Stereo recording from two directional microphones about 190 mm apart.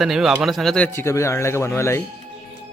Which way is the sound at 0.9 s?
15° left (ahead or behind).